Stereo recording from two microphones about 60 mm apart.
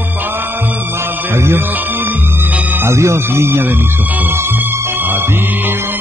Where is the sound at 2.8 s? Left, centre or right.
Right.